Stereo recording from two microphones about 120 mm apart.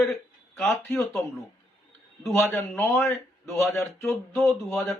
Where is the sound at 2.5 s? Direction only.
20° left (ahead or behind).